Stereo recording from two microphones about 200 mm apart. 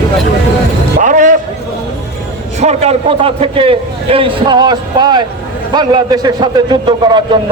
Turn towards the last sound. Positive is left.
turn(degrees=-20)  # may be behind; listen again after turning